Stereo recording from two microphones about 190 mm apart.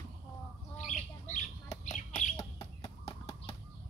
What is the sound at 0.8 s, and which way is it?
Squawk, 40° left (ahead or behind).